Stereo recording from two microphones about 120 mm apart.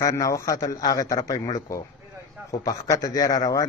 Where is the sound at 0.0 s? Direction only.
25° left (ahead or behind).